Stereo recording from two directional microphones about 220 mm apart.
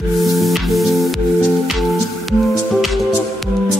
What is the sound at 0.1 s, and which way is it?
Music, centre (ahead or behind).